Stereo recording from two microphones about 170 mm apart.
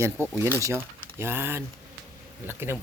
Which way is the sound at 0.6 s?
15° right (ahead or behind).